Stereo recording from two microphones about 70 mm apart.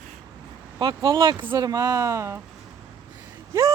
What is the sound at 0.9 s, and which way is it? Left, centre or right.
Speech, right.